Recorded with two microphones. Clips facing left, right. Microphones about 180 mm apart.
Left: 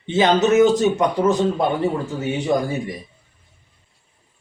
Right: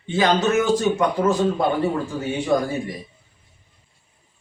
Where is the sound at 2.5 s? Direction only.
15° left (ahead or behind).